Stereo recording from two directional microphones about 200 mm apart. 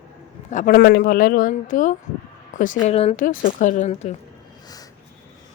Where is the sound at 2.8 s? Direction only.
30° left (ahead or behind).